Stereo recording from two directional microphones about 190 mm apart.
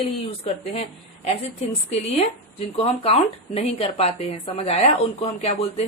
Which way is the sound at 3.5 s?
35° left (ahead or behind).